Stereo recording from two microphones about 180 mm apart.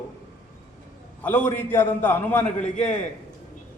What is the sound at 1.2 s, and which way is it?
A man's voice, 10° left (ahead or behind).